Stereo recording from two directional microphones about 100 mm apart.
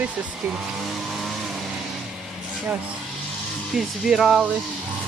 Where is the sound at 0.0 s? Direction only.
15° right (ahead or behind).